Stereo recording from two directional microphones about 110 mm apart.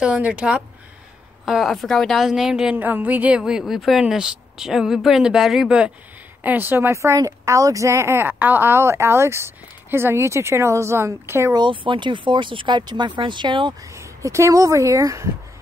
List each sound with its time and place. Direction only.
0.0 s a woman's voice: 10° right (ahead or behind)
6.4 s speech: 15° right (ahead or behind)
11.5 s speech: 50° right (ahead or behind)
13.9 s speech: 25° right (ahead or behind)